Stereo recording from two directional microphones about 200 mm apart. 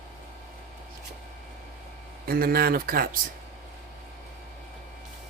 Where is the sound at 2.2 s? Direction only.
50° right (ahead or behind).